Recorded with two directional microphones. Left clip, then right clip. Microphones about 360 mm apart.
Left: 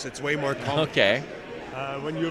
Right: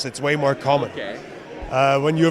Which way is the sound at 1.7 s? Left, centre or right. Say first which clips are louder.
Right 15 dB; right.